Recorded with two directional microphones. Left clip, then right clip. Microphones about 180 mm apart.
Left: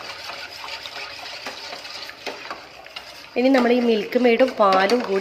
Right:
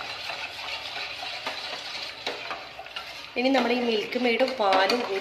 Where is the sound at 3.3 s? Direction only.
50° left (ahead or behind).